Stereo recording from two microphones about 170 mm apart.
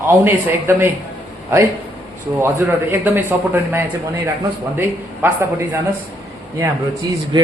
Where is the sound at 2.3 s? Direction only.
15° right (ahead or behind).